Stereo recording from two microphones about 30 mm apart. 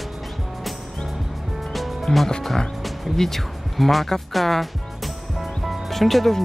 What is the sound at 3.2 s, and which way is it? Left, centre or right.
Speech, centre.